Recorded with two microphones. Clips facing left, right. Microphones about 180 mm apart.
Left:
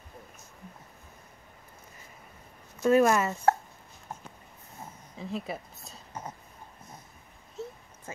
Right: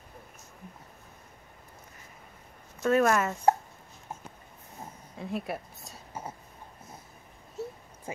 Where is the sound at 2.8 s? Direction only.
5° left (ahead or behind).